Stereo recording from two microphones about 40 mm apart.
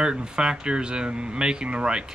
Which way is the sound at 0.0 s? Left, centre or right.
Centre.